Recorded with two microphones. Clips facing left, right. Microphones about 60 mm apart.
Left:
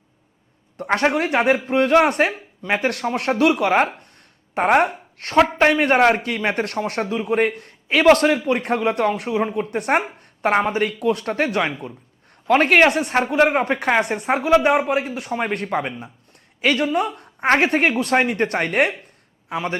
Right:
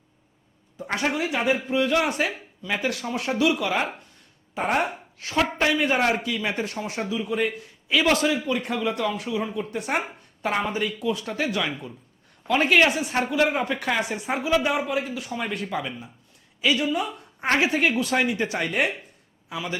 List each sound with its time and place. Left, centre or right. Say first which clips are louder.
0.9 s a man's voice: left 7 dB; left
10.5 s a man's voice: left 6 dB; left
13.7 s speech: left 7 dB; left
14.0 s a man's voice: left 6 dB; left
16.6 s a man's voice: left 4 dB; left